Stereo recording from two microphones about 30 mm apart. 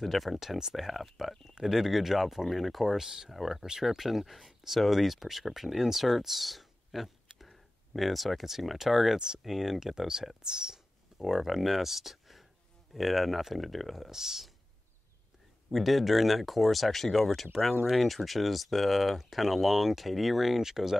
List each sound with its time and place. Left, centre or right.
0.0 s speech: centre
3.3 s speech: centre
14.1 s speech: centre
15.7 s speech: centre